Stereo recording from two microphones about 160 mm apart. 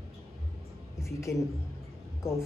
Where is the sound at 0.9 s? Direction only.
15° left (ahead or behind).